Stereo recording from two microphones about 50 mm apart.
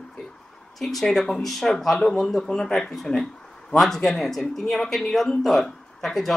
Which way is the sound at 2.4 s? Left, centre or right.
Centre.